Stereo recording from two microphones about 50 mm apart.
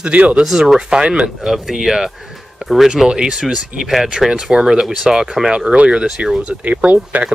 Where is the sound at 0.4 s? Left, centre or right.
Centre.